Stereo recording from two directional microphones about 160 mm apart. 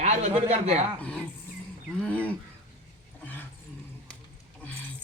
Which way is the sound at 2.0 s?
10° left (ahead or behind).